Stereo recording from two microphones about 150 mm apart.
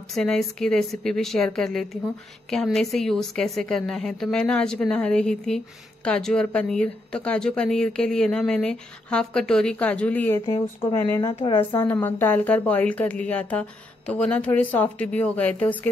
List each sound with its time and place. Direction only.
0.1 s speech: 5° left (ahead or behind)
10.5 s speech: 35° left (ahead or behind)
11.9 s speech: 15° left (ahead or behind)